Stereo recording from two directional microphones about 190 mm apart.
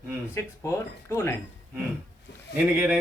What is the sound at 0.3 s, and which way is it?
Speech, 15° left (ahead or behind).